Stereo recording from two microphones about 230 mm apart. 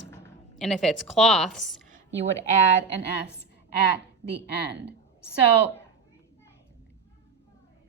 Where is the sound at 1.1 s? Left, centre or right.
Centre.